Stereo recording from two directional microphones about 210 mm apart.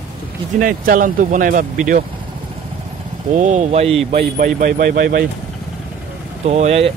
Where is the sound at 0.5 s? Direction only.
40° right (ahead or behind).